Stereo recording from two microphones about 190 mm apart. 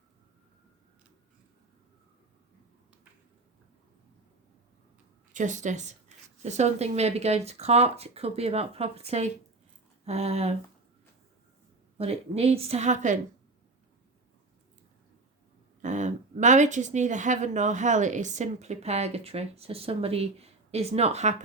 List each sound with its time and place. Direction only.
5.3 s speech: 40° right (ahead or behind)
11.9 s speech: 30° right (ahead or behind)
15.8 s speech: 40° right (ahead or behind)